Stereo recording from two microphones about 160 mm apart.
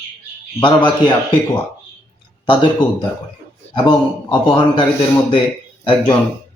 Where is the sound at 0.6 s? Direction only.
30° left (ahead or behind).